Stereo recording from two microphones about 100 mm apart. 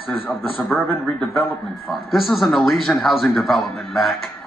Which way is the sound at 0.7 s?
10° left (ahead or behind).